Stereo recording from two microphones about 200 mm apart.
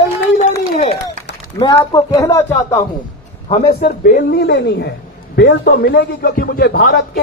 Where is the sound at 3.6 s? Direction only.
45° left (ahead or behind).